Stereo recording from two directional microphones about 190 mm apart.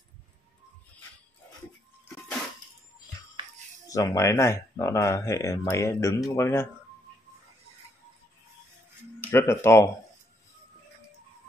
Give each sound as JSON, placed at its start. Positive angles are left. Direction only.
{"t": 3.9, "sound": "speech", "side_deg": 20}
{"t": 9.3, "sound": "speech", "side_deg": 15}